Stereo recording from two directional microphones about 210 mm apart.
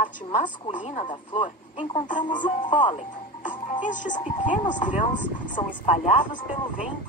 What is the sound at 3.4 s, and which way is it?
A woman's voice, 35° left (ahead or behind).